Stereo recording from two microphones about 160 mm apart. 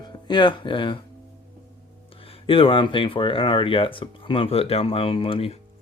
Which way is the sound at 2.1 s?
35° left (ahead or behind).